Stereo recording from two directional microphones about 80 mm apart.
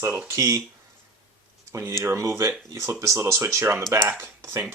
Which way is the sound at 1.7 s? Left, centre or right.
Right.